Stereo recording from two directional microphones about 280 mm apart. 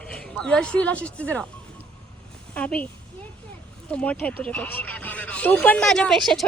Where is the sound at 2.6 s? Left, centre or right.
Centre.